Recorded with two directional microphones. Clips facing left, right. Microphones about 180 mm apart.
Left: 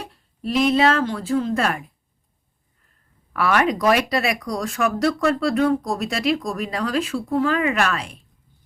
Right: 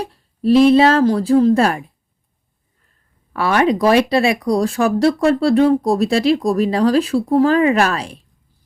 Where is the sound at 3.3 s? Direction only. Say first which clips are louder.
Right 4 dB; 30° right (ahead or behind).